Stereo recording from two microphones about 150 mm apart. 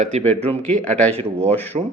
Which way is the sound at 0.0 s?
50° right (ahead or behind).